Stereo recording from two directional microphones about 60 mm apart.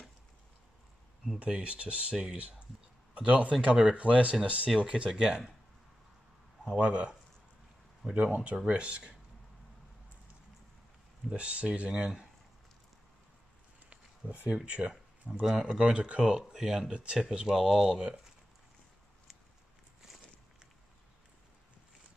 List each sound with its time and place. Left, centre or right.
1.4 s speech: centre
3.2 s speech: centre
6.6 s speech: centre
11.2 s speech: centre
13.8 s speech: centre
16.3 s speech: centre
16.9 s speech: centre